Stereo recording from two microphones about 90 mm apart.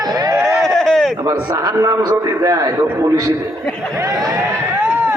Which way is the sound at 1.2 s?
40° right (ahead or behind).